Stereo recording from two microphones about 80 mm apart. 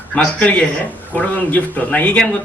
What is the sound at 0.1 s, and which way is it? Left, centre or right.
Speech, centre.